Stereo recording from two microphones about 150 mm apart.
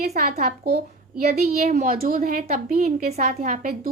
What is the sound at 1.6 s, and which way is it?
Speech, 50° right (ahead or behind).